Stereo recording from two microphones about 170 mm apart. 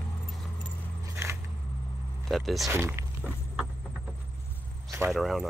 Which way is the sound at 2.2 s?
Centre (ahead or behind).